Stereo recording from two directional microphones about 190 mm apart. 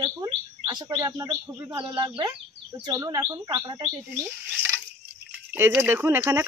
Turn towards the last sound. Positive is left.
turn(degrees=-15)  # may be behind; listen again after turning